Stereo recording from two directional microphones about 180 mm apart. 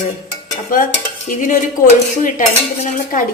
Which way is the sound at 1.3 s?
45° left (ahead or behind).